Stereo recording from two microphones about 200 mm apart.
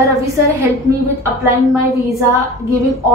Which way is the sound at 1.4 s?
15° right (ahead or behind).